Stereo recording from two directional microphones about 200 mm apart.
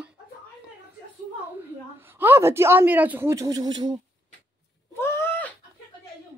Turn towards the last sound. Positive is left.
turn(degrees=10)  # may be behind; listen again after turning